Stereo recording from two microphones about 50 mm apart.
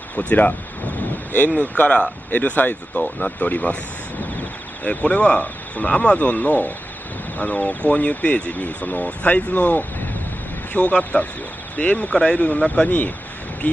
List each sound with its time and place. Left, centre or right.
0.1 s speech: left
1.6 s speech: left
4.8 s speech: left
10.7 s speech: left
12.1 s speech: centre